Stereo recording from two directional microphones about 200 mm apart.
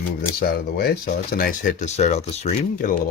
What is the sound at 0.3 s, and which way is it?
Speech, 50° left (ahead or behind).